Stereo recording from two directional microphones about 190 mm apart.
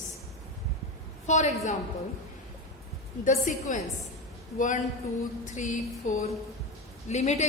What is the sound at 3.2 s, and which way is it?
A woman's voice, 40° left (ahead or behind).